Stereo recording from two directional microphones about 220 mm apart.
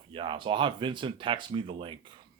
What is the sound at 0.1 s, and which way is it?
Speech, 25° right (ahead or behind).